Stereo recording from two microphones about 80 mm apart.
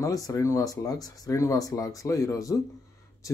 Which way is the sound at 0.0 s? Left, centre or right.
Left.